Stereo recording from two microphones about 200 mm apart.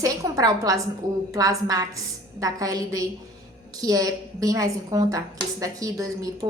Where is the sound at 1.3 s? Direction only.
15° right (ahead or behind).